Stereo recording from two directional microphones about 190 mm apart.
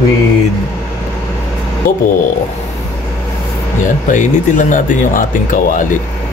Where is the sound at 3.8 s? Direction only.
40° left (ahead or behind).